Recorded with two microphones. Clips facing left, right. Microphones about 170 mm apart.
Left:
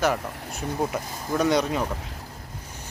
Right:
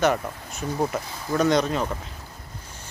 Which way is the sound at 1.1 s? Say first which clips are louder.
Even; 45° left (ahead or behind).